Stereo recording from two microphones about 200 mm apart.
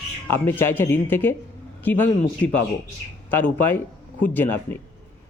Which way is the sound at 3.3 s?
10° left (ahead or behind).